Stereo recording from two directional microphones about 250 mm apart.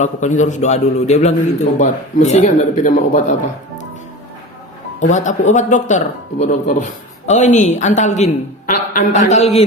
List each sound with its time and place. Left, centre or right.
0.0 s a man's voice: left
4.9 s a man's voice: left